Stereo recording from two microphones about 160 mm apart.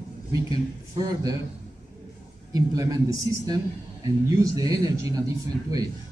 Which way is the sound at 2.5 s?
20° right (ahead or behind).